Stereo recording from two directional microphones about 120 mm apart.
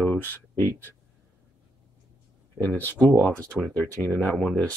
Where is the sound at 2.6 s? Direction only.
15° left (ahead or behind).